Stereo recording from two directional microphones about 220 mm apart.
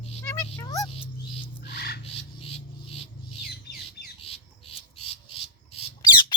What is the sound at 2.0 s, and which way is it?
Music, 25° left (ahead or behind).